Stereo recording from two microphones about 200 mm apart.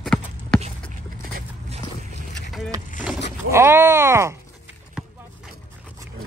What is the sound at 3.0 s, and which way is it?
Speech, 10° right (ahead or behind).